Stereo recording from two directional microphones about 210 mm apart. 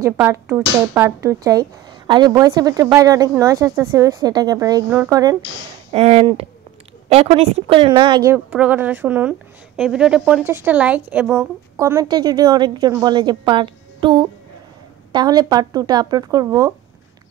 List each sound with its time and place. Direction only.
0.0 s speech: 10° right (ahead or behind)
5.9 s a woman's voice: 30° right (ahead or behind)